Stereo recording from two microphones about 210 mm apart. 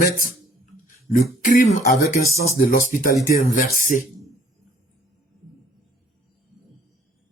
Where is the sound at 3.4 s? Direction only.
40° left (ahead or behind).